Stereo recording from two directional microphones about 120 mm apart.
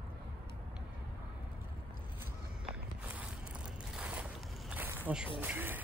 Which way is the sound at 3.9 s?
10° right (ahead or behind).